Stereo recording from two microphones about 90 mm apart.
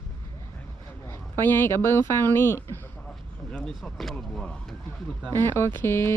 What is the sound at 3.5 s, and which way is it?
Speech, 5° left (ahead or behind).